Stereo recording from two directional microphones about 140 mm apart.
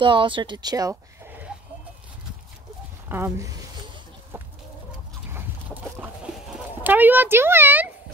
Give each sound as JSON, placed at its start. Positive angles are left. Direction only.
{"t": 0.0, "sound": "speech", "side_deg": -35}
{"t": 3.1, "sound": "speech", "side_deg": -20}
{"t": 4.3, "sound": "chicken", "side_deg": -15}
{"t": 6.3, "sound": "a sound", "side_deg": -10}